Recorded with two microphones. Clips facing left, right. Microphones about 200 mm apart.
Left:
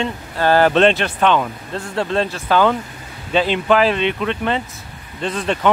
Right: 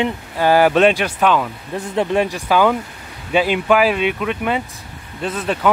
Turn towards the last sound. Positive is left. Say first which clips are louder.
# even
turn(degrees=-5)  # may be behind; listen again after turning